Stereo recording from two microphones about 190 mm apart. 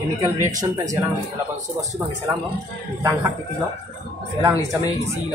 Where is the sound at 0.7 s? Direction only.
15° right (ahead or behind).